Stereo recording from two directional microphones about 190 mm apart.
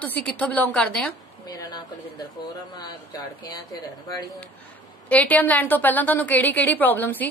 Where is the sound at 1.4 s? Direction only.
20° left (ahead or behind).